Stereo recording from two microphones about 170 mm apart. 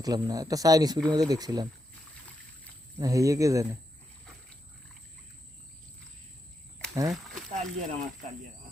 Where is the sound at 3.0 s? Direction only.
20° right (ahead or behind).